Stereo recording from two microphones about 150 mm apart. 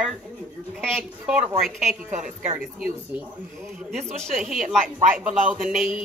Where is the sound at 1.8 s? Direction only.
55° right (ahead or behind).